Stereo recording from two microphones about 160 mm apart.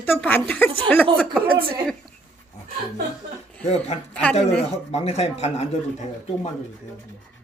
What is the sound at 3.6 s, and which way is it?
A man's voice, 40° left (ahead or behind).